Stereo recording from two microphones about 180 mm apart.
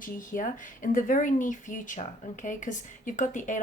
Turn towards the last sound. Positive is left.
turn(degrees=45)  # may be behind; listen again after turning